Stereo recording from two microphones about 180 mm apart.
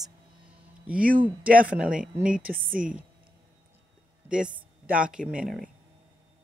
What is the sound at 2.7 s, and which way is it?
Speech, 50° right (ahead or behind).